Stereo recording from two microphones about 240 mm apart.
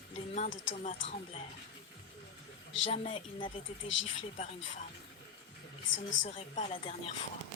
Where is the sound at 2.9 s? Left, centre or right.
Left.